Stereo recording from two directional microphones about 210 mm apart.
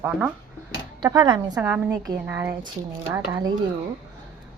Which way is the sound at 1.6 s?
5° right (ahead or behind).